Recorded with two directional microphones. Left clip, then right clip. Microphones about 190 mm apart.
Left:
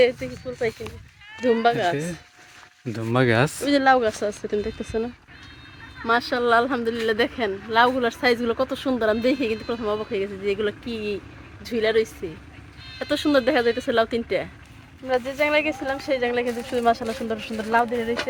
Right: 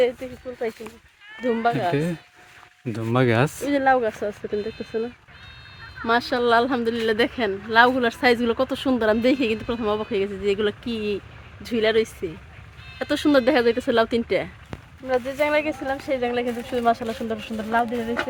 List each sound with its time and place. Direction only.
0.0 s speech: 45° left (ahead or behind)
2.9 s speech: 5° right (ahead or behind)
3.6 s speech: 60° left (ahead or behind)
6.1 s speech: 25° right (ahead or behind); by 14.5 s 55° right (ahead or behind)
15.0 s speech: 10° right (ahead or behind); by 18.3 s 15° left (ahead or behind)